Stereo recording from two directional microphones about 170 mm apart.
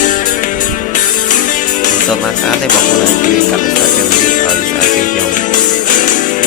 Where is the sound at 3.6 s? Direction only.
50° left (ahead or behind).